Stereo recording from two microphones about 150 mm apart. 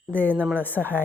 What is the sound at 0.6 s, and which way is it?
Speech, 10° left (ahead or behind).